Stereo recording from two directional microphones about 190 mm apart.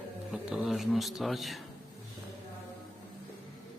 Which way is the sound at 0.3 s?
Centre (ahead or behind).